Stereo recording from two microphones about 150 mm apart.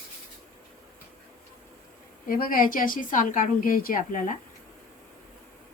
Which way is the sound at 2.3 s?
70° left (ahead or behind).